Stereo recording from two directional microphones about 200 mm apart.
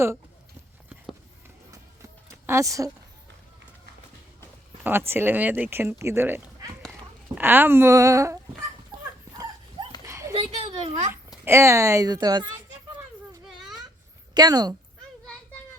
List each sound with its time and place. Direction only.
2.5 s speech: 15° right (ahead or behind)
4.8 s speech: 10° right (ahead or behind)
10.1 s a sound: 15° right (ahead or behind)
10.3 s a sound: 25° right (ahead or behind)
11.4 s speech: 15° right (ahead or behind)
14.3 s speech: 20° right (ahead or behind)